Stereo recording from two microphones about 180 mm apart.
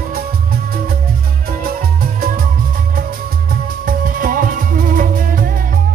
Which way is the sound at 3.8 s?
50° right (ahead or behind).